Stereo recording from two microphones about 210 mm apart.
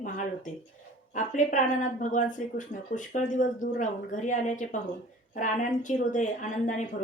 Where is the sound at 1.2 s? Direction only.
35° left (ahead or behind).